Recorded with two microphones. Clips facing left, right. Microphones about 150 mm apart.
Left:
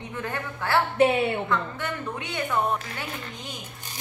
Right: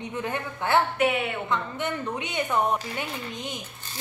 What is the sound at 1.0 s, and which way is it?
Speech, 30° left (ahead or behind).